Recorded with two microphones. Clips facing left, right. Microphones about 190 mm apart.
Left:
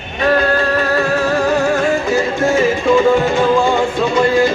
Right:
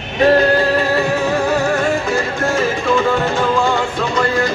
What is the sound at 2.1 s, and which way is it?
Music, 10° left (ahead or behind).